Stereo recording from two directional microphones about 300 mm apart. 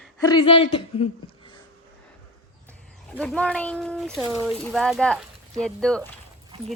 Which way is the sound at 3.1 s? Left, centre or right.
Centre.